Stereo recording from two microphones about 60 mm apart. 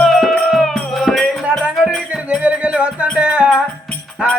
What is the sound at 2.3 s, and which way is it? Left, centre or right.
Music, right.